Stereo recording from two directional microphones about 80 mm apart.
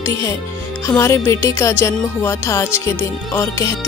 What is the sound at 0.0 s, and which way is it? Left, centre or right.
Music, left.